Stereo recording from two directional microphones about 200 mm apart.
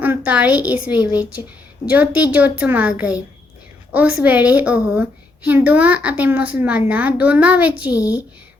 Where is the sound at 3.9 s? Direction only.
5° right (ahead or behind).